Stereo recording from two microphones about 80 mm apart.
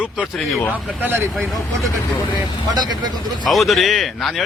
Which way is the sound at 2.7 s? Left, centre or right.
Right.